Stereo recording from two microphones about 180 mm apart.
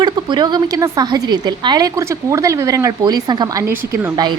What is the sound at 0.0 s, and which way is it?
A woman's voice, 25° right (ahead or behind).